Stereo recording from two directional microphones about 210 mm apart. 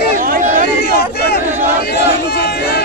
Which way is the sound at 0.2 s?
40° right (ahead or behind).